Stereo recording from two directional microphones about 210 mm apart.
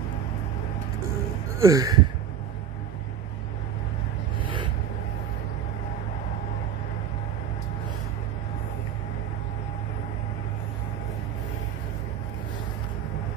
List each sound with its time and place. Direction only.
1.6 s speech: 15° right (ahead or behind)